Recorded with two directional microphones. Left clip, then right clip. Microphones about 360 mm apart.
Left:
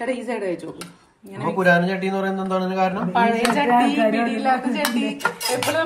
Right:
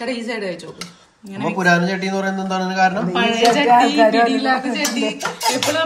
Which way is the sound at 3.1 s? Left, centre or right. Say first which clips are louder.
Right 3 dB; centre.